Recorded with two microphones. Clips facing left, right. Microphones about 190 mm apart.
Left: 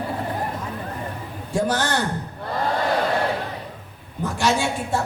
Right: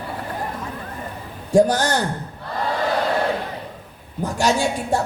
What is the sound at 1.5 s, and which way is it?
Speech, 40° right (ahead or behind).